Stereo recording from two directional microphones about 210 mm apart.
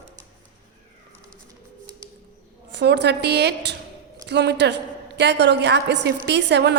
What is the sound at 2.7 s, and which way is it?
A woman's voice, 55° right (ahead or behind).